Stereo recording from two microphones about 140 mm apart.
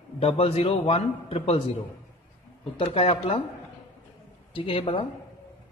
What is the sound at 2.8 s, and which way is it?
Speech, 40° left (ahead or behind).